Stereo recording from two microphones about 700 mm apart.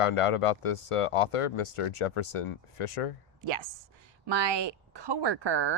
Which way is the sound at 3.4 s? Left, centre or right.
Right.